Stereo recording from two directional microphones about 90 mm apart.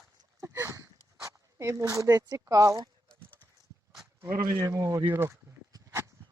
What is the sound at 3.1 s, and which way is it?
Clip-clop, 15° left (ahead or behind).